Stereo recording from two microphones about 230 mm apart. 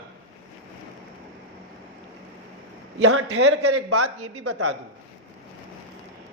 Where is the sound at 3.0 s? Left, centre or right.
Right.